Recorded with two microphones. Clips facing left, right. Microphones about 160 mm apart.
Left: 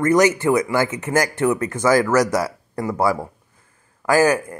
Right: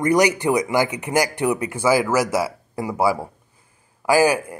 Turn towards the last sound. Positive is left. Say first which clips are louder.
# even
turn(degrees=-10)  # may be behind; listen again after turning